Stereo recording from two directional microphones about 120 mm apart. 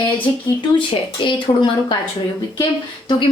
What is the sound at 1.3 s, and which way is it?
Speech, 40° left (ahead or behind).